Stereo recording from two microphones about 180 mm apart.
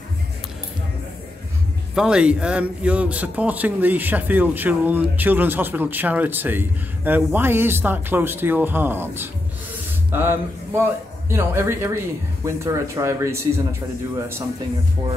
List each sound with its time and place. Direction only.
2.0 s a man's voice: 5° right (ahead or behind)